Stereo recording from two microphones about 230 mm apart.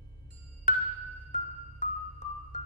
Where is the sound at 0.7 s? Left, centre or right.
Left.